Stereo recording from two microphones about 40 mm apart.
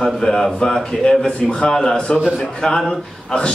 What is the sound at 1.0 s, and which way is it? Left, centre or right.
Speech, left.